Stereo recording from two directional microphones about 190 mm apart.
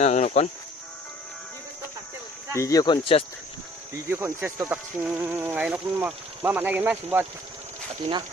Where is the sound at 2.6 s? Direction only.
20° left (ahead or behind).